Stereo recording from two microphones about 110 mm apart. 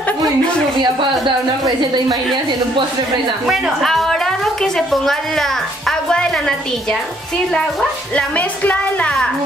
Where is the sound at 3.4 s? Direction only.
Centre (ahead or behind).